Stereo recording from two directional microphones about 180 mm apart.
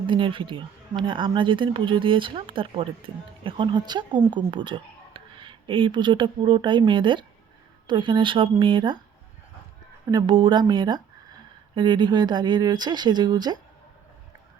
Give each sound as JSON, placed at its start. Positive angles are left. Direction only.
{"t": 0.1, "sound": "speech", "side_deg": -30}
{"t": 10.1, "sound": "speech", "side_deg": -25}